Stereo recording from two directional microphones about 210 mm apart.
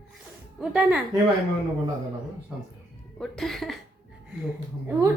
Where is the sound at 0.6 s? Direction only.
5° right (ahead or behind).